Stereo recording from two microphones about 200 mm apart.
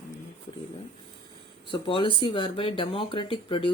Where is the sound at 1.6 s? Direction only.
25° left (ahead or behind).